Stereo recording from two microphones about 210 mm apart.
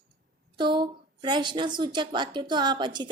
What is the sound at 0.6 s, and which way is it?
A woman's voice, 20° right (ahead or behind).